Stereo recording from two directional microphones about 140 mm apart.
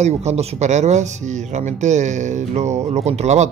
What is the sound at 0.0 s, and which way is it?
Speech, 55° right (ahead or behind).